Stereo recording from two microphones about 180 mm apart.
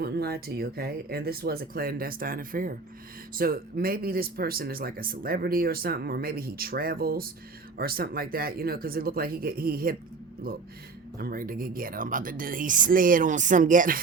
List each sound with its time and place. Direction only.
0.0 s speech: 60° right (ahead or behind)